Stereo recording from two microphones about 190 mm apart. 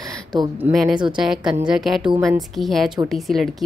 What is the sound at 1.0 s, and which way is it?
A woman's voice, centre (ahead or behind).